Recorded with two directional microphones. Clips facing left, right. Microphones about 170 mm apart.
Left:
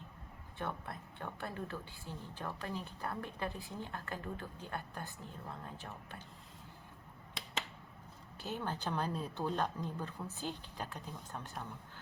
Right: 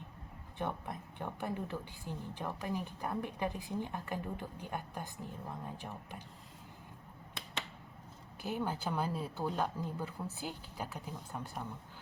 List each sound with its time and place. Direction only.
0.6 s a woman's voice: 15° right (ahead or behind)
8.4 s a woman's voice: 10° right (ahead or behind)